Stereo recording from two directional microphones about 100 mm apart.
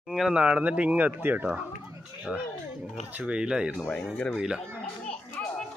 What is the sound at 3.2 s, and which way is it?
Speech, 10° right (ahead or behind).